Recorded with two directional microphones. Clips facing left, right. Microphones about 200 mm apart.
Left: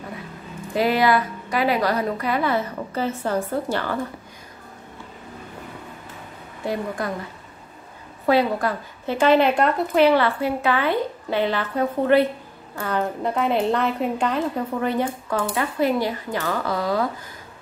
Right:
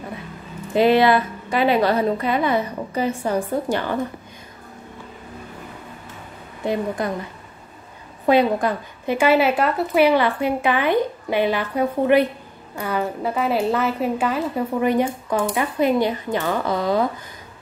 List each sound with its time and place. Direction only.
0.7 s a woman's voice: 25° right (ahead or behind)
6.6 s a woman's voice: 20° right (ahead or behind)
8.3 s a woman's voice: 20° right (ahead or behind)